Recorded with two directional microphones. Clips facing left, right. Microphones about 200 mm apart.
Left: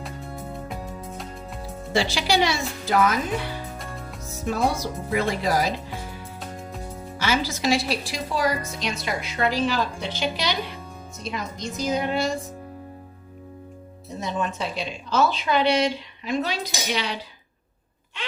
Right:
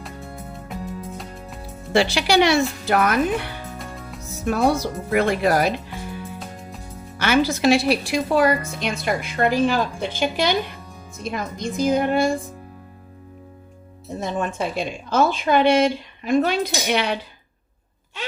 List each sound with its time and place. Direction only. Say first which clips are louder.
1.9 s speech: right 4 dB; 65° right (ahead or behind)
7.2 s a woman's voice: right 6 dB; 60° right (ahead or behind)
14.2 s a woman's voice: right 3 dB; 50° right (ahead or behind)